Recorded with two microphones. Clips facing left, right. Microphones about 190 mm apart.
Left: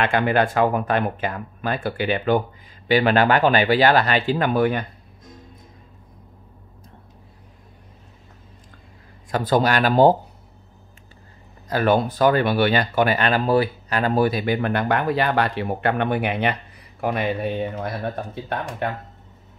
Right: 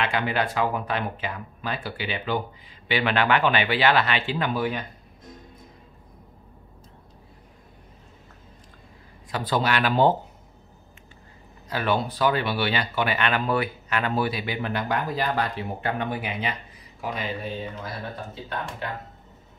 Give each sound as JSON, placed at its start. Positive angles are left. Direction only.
{"t": 0.0, "sound": "speech", "side_deg": 50}
{"t": 2.9, "sound": "speech", "side_deg": 40}
{"t": 9.3, "sound": "speech", "side_deg": 45}
{"t": 11.7, "sound": "speech", "side_deg": 45}